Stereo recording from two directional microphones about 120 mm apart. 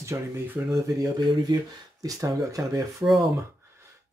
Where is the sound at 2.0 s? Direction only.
30° right (ahead or behind).